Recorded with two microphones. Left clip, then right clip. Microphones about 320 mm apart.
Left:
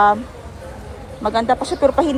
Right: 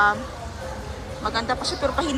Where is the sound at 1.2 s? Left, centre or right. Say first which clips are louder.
Left 7 dB; centre.